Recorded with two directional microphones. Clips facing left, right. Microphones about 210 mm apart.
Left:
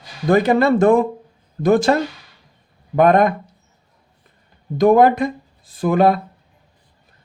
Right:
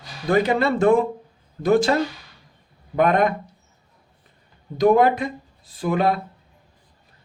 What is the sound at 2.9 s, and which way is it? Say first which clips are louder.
Speech: left 5 dB; 45° left (ahead or behind).